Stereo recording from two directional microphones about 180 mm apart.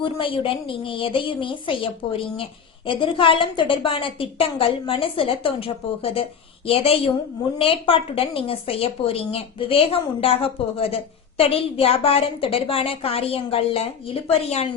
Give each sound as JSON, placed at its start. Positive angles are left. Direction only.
{"t": 0.0, "sound": "a woman's voice", "side_deg": 30}